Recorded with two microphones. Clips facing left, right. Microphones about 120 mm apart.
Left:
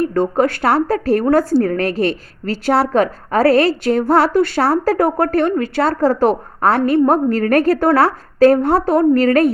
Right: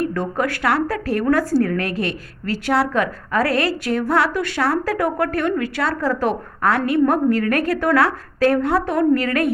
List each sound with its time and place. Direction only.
0.1 s a woman's voice: 30° left (ahead or behind)